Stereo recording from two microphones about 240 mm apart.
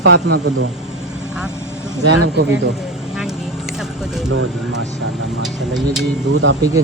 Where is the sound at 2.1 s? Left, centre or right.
Right.